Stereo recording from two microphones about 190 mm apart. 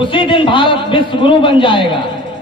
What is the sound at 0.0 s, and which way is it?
A man's voice, 25° left (ahead or behind).